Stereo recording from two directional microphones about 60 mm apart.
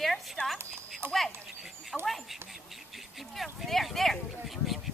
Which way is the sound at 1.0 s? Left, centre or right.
Right.